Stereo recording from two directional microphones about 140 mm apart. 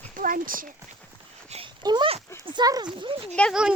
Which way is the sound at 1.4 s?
45° right (ahead or behind).